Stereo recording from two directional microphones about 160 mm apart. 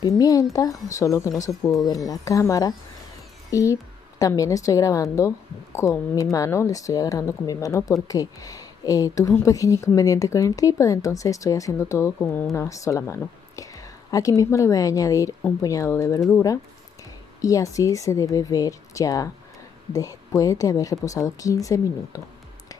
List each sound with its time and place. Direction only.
0.0 s speech: 20° left (ahead or behind)
17.4 s speech: 20° left (ahead or behind)